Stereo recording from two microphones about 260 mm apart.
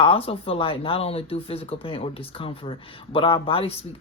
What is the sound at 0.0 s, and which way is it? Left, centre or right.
Speech, left.